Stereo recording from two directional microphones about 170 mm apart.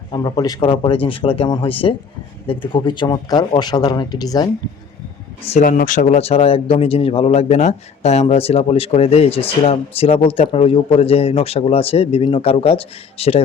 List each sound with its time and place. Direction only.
0.1 s speech: 25° left (ahead or behind)
5.5 s speech: 50° left (ahead or behind)